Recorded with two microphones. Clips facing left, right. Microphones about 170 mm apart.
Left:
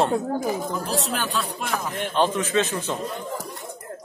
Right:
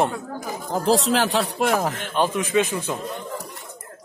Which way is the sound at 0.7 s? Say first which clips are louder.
Right 7 dB; 90° right.